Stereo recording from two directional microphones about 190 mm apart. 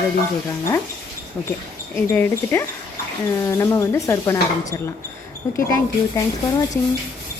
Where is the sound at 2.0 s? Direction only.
10° left (ahead or behind).